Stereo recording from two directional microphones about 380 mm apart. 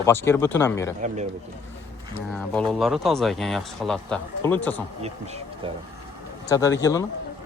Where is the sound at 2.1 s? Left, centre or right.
Centre.